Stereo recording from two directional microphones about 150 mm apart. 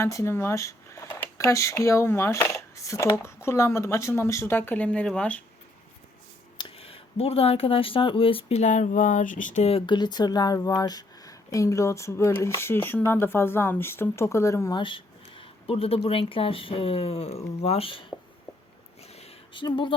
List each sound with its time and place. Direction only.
0.0 s speech: 20° left (ahead or behind)
6.6 s speech: 40° left (ahead or behind); by 9.6 s 60° left (ahead or behind)
9.6 s speech: 35° left (ahead or behind); by 14.8 s 20° left (ahead or behind)
14.8 s speech: 35° left (ahead or behind)
19.0 s a sound: 45° left (ahead or behind)
19.6 s speech: 30° left (ahead or behind)